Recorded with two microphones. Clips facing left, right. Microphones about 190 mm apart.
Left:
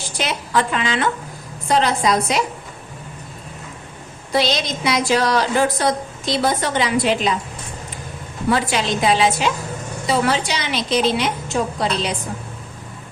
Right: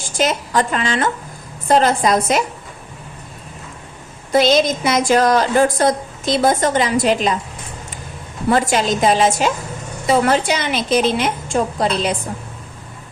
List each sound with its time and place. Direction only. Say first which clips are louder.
0.0 s a woman's voice: right 6 dB; 45° right (ahead or behind)
4.3 s a woman's voice: right 6 dB; 50° right (ahead or behind)
8.4 s a woman's voice: right 3 dB; 45° right (ahead or behind)